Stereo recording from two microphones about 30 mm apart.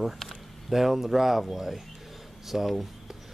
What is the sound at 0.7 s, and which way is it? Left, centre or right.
Speech, centre.